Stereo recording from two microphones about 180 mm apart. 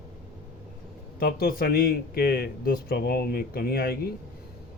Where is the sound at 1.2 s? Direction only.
55° left (ahead or behind).